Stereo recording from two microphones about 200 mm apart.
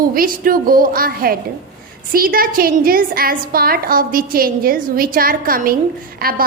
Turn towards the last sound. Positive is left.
turn(degrees=-45)  # may be behind; listen again after turning